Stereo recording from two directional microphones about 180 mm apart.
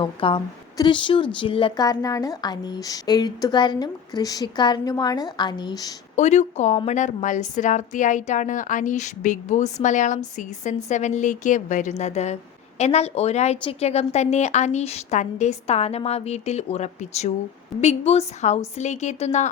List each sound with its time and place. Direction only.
0.0 s a woman's voice: 30° left (ahead or behind)
6.1 s a woman's voice: 40° left (ahead or behind)